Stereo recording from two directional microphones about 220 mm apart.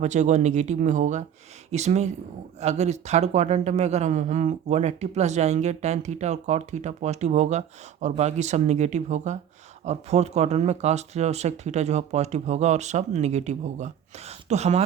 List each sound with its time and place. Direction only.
0.0 s a man's voice: 35° right (ahead or behind)